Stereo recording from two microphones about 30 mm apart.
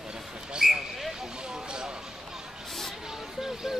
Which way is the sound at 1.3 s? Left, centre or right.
Right.